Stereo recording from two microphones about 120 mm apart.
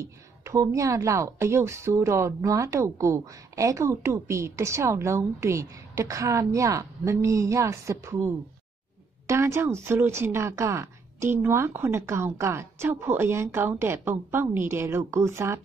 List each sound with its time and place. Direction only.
0.0 s a woman's voice: 25° right (ahead or behind)
9.3 s a woman's voice: 20° right (ahead or behind)